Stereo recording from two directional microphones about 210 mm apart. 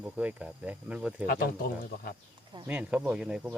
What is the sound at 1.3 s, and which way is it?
Speech, 45° left (ahead or behind).